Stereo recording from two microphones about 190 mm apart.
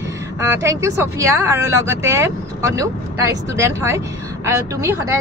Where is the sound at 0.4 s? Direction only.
15° right (ahead or behind).